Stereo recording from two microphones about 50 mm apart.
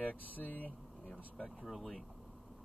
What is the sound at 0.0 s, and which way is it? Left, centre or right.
Speech, left.